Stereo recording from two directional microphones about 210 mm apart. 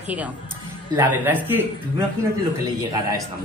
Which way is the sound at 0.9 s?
10° right (ahead or behind).